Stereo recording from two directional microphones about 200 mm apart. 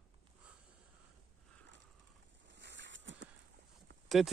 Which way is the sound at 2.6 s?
60° right (ahead or behind).